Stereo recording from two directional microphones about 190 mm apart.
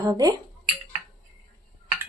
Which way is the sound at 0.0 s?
20° right (ahead or behind).